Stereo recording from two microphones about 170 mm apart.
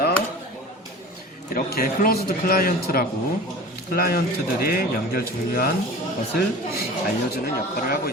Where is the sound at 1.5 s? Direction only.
55° left (ahead or behind).